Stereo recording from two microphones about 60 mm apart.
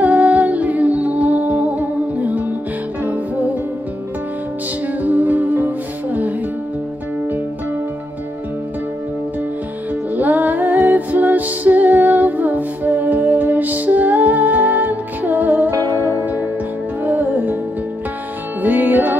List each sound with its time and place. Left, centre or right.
0.5 s music: right
4.8 s music: right
10.1 s music: right
15.8 s music: left
16.2 s music: right
18.6 s music: right